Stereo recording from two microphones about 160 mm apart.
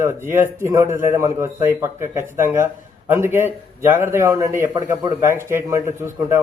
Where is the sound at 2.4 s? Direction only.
20° right (ahead or behind).